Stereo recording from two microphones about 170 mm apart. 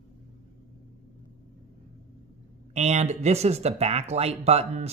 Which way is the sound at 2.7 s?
40° right (ahead or behind).